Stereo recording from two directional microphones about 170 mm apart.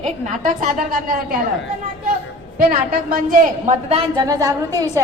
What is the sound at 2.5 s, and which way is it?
A woman's voice, 55° right (ahead or behind).